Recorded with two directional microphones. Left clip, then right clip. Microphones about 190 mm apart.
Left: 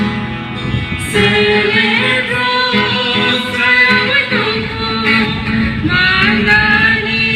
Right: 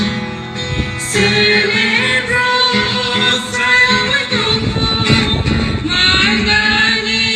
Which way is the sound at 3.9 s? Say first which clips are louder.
Left 2 dB; 20° left (ahead or behind).